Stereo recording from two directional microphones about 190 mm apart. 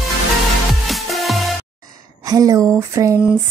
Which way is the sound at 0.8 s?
Centre (ahead or behind).